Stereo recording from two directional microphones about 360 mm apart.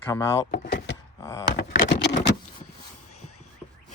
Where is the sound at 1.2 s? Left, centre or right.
Centre.